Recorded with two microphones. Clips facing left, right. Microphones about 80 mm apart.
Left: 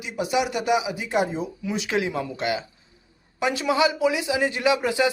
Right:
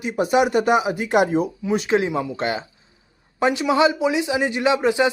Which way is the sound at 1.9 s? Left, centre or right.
Right.